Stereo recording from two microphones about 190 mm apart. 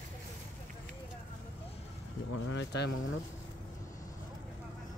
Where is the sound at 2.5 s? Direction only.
70° left (ahead or behind).